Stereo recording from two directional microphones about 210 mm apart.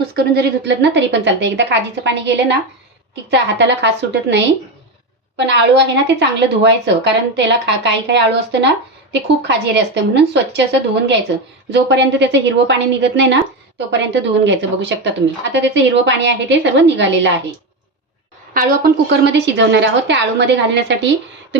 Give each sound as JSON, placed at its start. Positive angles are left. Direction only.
{"t": 0.1, "sound": "a woman's voice", "side_deg": -50}
{"t": 5.5, "sound": "a woman's voice", "side_deg": -55}
{"t": 18.5, "sound": "a woman's voice", "side_deg": -50}